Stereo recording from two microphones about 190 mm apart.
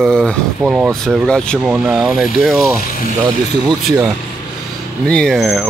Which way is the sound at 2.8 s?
45° left (ahead or behind).